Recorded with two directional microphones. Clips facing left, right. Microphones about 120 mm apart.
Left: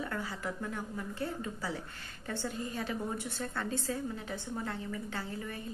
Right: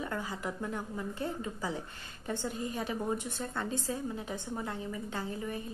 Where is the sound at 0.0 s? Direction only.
15° right (ahead or behind).